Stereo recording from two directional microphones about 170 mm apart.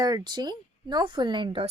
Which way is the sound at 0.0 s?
25° right (ahead or behind).